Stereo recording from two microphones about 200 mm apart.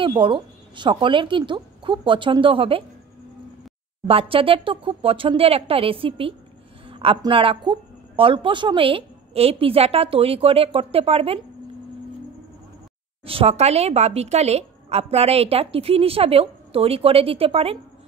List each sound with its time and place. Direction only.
0.0 s a woman's voice: 25° right (ahead or behind)
4.1 s a woman's voice: 30° right (ahead or behind)
13.2 s a woman's voice: 30° right (ahead or behind)